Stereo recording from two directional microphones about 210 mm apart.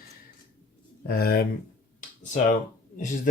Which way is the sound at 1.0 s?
45° left (ahead or behind).